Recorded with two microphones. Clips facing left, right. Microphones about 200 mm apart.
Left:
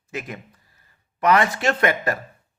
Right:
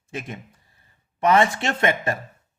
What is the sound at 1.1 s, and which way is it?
A man's voice, 25° right (ahead or behind).